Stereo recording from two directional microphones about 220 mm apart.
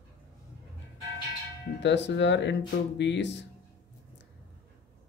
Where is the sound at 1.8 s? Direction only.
55° left (ahead or behind).